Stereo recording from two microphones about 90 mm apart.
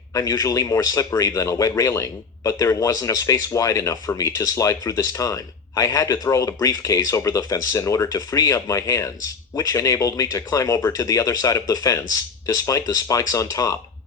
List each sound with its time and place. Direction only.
0.1 s a man's voice: 40° left (ahead or behind)